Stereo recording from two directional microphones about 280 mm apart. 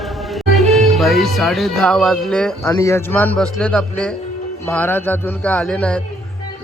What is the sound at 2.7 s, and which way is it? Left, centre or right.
A man's voice, centre.